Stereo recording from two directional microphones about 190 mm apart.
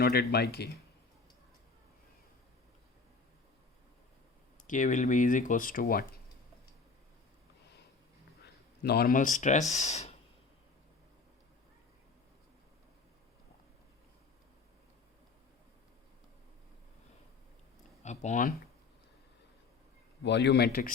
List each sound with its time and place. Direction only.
0.0 s speech: 55° left (ahead or behind)
4.6 s speech: 40° left (ahead or behind)
8.8 s speech: 55° left (ahead or behind); by 10.2 s 35° left (ahead or behind)
18.0 s speech: 35° left (ahead or behind)
20.2 s speech: 65° left (ahead or behind)